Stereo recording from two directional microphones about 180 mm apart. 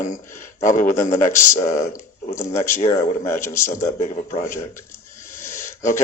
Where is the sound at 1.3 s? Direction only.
15° left (ahead or behind).